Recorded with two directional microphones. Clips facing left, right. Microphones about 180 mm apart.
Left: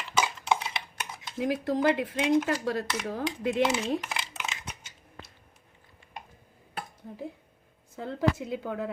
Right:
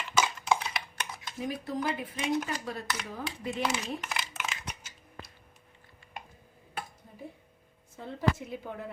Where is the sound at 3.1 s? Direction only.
85° left.